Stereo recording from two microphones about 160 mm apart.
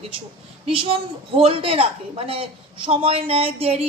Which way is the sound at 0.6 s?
35° right (ahead or behind).